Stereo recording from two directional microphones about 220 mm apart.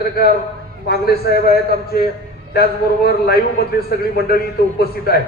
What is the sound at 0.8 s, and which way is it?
A man's voice, 45° left (ahead or behind).